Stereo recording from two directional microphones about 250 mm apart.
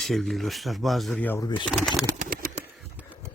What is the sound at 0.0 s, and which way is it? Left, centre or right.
Speech, centre.